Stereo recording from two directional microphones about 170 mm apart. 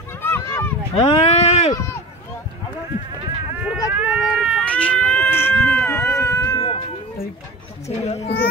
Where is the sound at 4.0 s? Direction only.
5° right (ahead or behind); by 6.7 s 15° left (ahead or behind).